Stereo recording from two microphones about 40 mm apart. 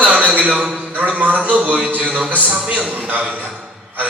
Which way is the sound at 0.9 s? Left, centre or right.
Right.